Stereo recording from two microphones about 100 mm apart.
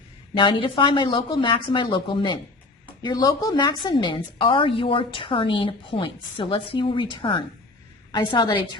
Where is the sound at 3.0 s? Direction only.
40° left (ahead or behind).